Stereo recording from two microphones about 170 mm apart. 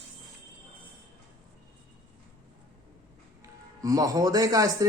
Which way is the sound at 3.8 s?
20° right (ahead or behind).